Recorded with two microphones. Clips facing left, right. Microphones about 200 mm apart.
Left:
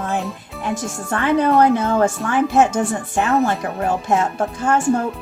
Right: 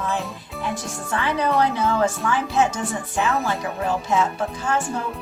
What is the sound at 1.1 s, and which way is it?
Speech, 50° left (ahead or behind).